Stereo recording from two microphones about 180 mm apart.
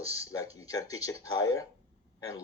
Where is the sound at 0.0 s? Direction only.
20° left (ahead or behind).